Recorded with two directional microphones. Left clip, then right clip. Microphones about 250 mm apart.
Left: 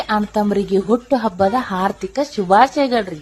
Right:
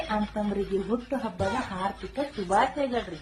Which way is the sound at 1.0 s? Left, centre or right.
Centre.